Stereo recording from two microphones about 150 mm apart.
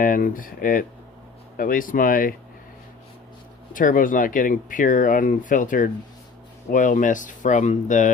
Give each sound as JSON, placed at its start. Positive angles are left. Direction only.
{"t": 0.0, "sound": "speech", "side_deg": 65}
{"t": 3.7, "sound": "speech", "side_deg": 60}